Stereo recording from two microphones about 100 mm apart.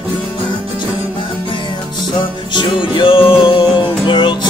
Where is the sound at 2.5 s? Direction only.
50° left (ahead or behind).